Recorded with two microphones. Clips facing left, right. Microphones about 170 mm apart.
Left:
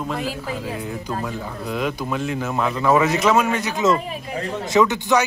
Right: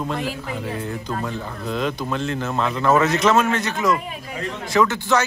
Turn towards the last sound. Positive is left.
turn(degrees=15)  # may be behind; listen again after turning